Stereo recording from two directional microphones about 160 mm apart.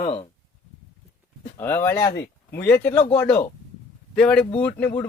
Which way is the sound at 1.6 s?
15° left (ahead or behind).